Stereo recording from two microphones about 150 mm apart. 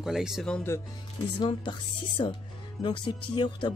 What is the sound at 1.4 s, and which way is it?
Speech, 30° left (ahead or behind).